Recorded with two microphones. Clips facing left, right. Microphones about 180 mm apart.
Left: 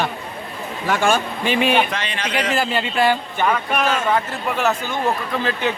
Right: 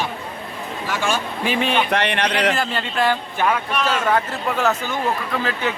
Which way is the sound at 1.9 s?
65° right (ahead or behind).